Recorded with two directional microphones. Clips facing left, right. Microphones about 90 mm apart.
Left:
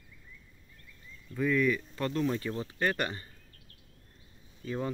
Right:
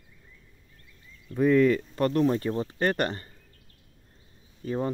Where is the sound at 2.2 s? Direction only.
30° right (ahead or behind); by 3.2 s 50° right (ahead or behind).